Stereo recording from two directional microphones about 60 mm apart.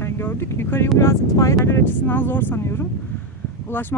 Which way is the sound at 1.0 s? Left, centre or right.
Left.